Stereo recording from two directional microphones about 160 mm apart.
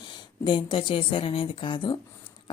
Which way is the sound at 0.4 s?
30° left (ahead or behind).